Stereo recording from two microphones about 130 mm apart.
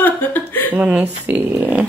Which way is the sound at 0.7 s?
10° right (ahead or behind).